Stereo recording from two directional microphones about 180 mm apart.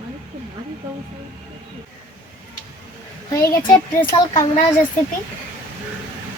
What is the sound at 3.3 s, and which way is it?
A child's voice, 15° left (ahead or behind).